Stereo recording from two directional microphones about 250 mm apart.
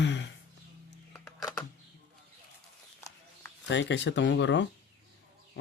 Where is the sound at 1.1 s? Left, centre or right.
Centre.